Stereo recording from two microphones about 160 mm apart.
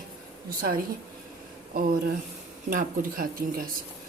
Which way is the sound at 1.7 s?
60° right (ahead or behind).